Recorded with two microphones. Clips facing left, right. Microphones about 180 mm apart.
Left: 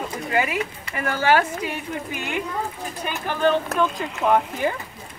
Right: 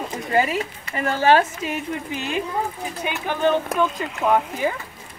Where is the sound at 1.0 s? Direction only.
25° right (ahead or behind).